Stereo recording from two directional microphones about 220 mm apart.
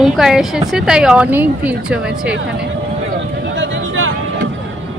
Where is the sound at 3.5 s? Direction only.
55° right (ahead or behind).